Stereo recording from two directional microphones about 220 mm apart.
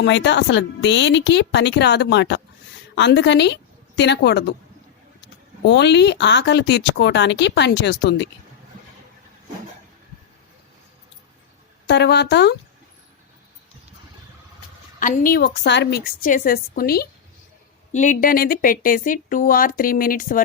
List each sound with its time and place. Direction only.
0.0 s a woman's voice: 55° left (ahead or behind)
5.6 s a woman's voice: 50° left (ahead or behind)
11.9 s a woman's voice: 50° left (ahead or behind)
14.9 s speech: 35° left (ahead or behind)